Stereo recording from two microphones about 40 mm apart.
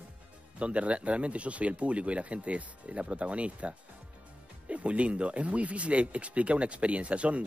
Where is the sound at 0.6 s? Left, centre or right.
Right.